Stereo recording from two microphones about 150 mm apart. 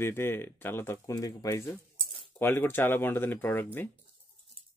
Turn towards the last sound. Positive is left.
turn(degrees=15)  # may be behind; listen again after turning